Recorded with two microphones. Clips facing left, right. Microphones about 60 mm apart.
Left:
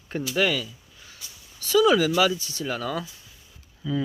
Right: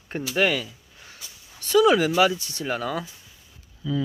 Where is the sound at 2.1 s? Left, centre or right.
Right.